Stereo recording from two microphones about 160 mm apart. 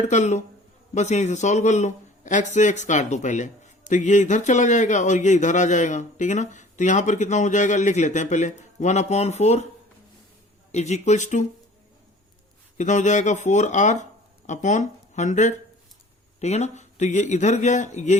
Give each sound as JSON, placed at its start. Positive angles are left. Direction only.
{"t": 0.1, "sound": "a man's voice", "side_deg": 45}
{"t": 10.7, "sound": "a man's voice", "side_deg": 45}
{"t": 12.7, "sound": "a man's voice", "side_deg": 50}